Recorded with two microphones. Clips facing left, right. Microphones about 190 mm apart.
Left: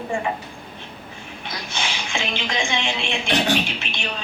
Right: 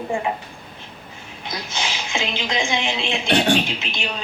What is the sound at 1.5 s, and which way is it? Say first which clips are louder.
Speech: right 2 dB; 20° right (ahead or behind).